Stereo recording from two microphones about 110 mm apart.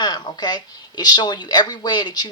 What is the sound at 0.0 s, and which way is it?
A woman's voice, 40° left (ahead or behind).